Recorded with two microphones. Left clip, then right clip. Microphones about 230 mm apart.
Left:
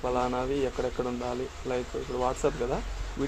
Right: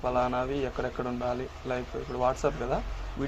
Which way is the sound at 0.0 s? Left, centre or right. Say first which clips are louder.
Right 1 dB; centre.